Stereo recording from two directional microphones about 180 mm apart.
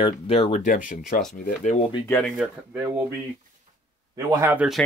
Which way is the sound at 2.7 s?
15° right (ahead or behind).